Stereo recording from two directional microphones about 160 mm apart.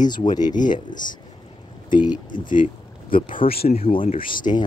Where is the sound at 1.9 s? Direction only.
25° left (ahead or behind).